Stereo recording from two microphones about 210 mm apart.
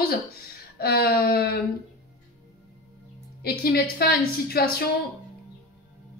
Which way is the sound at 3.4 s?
50° left (ahead or behind).